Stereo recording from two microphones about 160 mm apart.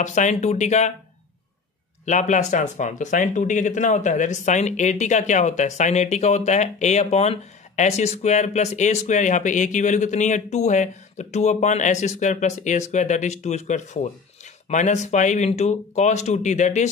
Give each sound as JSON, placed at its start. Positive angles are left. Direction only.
{"t": 0.0, "sound": "speech", "side_deg": 50}
{"t": 2.0, "sound": "speech", "side_deg": 50}